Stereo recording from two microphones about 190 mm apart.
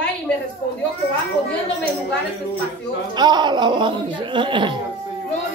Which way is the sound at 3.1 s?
20° right (ahead or behind).